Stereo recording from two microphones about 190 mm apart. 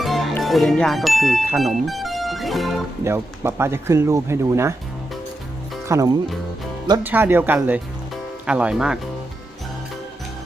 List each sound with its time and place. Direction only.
0.0 s speech: centre (ahead or behind)
3.0 s speech: 15° right (ahead or behind)
5.9 s speech: 20° right (ahead or behind)